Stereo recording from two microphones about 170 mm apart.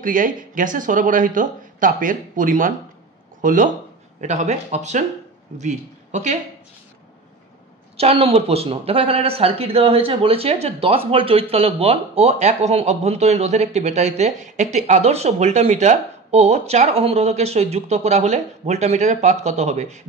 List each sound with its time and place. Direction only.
0.0 s speech: 50° right (ahead or behind)
8.0 s speech: 35° right (ahead or behind)